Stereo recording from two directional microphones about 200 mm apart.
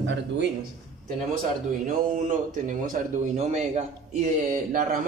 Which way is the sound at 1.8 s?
40° right (ahead or behind).